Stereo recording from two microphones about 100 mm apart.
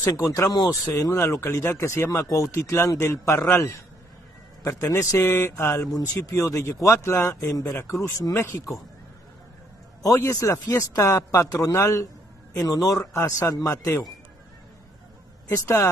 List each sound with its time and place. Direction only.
0.0 s speech: 30° left (ahead or behind)
10.0 s speech: 35° left (ahead or behind)
15.4 s speech: 35° left (ahead or behind)